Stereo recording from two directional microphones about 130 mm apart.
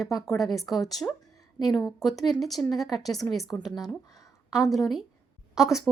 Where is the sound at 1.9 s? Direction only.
Centre (ahead or behind).